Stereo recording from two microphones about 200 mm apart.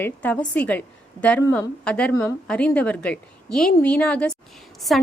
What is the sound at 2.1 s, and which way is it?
Speech, 15° left (ahead or behind).